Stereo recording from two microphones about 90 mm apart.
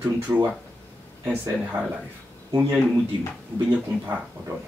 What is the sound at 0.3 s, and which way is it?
Speech, 10° right (ahead or behind).